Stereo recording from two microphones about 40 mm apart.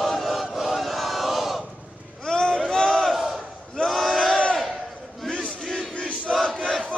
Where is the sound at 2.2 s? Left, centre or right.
Centre.